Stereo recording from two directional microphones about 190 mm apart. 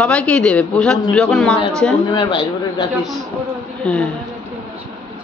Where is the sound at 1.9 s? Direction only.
20° left (ahead or behind).